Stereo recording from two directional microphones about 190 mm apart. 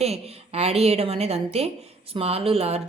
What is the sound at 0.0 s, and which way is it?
Speech, 35° right (ahead or behind).